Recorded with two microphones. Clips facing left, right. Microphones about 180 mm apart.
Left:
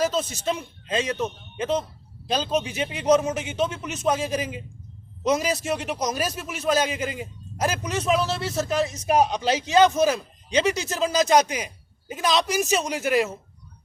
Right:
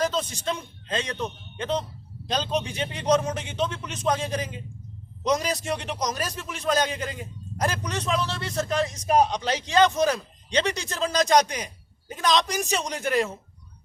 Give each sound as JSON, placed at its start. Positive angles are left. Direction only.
{"t": 0.0, "sound": "a man's voice", "side_deg": 10}